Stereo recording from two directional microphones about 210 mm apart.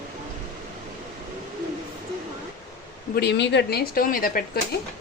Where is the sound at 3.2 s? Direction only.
55° left (ahead or behind).